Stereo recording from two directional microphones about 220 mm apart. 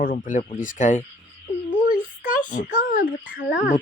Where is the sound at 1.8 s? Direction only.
40° left (ahead or behind).